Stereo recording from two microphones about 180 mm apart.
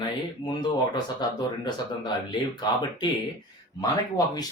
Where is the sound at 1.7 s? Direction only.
25° left (ahead or behind).